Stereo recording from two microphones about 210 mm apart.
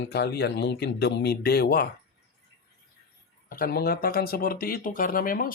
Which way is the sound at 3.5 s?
45° left (ahead or behind).